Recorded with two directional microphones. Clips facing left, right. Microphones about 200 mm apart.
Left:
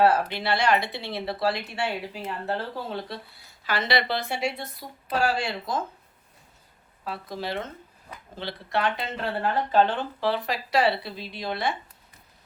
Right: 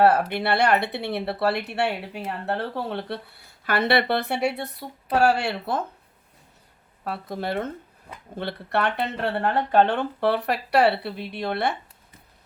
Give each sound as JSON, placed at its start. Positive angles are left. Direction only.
{"t": 0.0, "sound": "speech", "side_deg": -60}
{"t": 7.0, "sound": "speech", "side_deg": -55}